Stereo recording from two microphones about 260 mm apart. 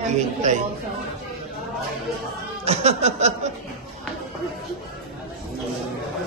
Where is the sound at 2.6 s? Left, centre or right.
Right.